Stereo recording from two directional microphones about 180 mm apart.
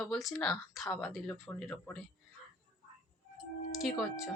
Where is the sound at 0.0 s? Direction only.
Centre (ahead or behind).